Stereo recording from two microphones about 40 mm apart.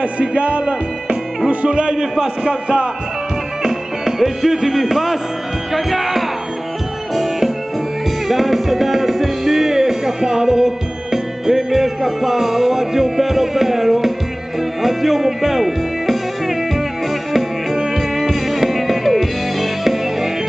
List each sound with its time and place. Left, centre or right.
0.2 s music: right
3.6 s music: centre
5.7 s speech: centre
7.2 s music: centre